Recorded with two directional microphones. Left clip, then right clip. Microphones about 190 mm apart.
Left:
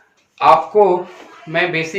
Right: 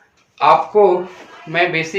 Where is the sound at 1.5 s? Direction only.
15° right (ahead or behind).